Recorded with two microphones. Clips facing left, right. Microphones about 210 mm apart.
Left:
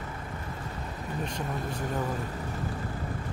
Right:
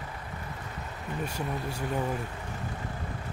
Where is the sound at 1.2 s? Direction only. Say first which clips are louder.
Right 1 dB; 10° right (ahead or behind).